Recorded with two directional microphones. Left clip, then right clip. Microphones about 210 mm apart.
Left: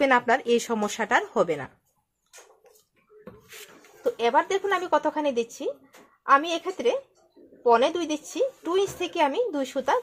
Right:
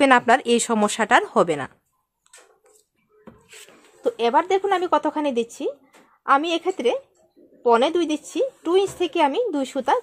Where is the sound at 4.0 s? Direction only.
45° right (ahead or behind).